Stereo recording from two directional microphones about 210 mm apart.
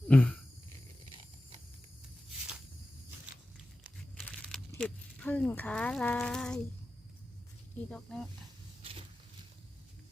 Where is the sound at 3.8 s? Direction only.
Centre (ahead or behind).